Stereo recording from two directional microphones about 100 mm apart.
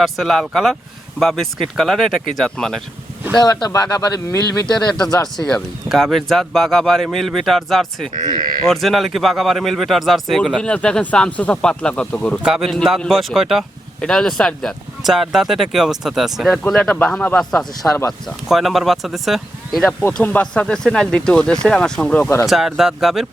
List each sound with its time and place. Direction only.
0.0 s speech: centre (ahead or behind)
3.4 s speech: 40° left (ahead or behind)
4.7 s speech: 5° left (ahead or behind)
8.3 s speech: 45° right (ahead or behind)
8.6 s speech: centre (ahead or behind)
12.5 s speech: centre (ahead or behind)
22.2 s speech: 25° left (ahead or behind)
22.4 s speech: centre (ahead or behind)